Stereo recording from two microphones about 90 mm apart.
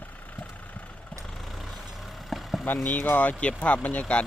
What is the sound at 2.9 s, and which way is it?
Speech, 20° left (ahead or behind).